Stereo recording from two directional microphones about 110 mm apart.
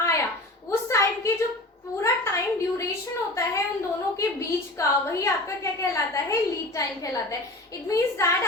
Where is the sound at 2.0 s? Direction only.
25° left (ahead or behind).